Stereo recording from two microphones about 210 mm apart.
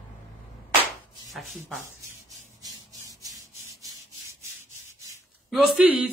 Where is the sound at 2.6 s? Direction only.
15° right (ahead or behind).